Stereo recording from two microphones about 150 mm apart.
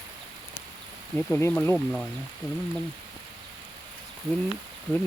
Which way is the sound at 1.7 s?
Centre (ahead or behind).